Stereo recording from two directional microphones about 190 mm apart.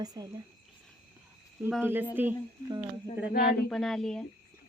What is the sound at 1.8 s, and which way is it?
Speech, 10° right (ahead or behind).